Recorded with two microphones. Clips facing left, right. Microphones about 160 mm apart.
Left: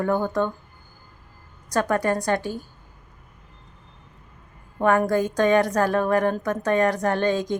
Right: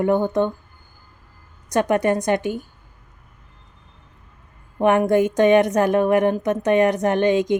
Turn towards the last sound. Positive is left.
turn(degrees=-20)  # may be behind; listen again after turning